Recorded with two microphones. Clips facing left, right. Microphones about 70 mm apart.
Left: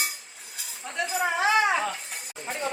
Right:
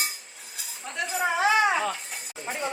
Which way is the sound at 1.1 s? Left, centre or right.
Centre.